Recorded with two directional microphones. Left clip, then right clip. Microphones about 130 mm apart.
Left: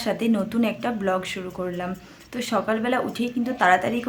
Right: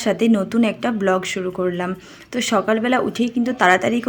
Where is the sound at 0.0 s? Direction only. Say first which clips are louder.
Right 6 dB; 35° right (ahead or behind).